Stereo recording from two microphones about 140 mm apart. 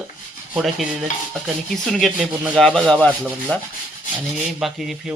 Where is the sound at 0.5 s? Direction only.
Centre (ahead or behind).